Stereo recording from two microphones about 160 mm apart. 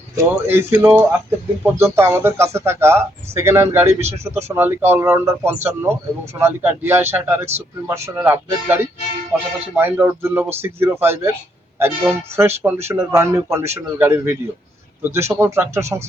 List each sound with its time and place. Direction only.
0.2 s speech: 15° right (ahead or behind)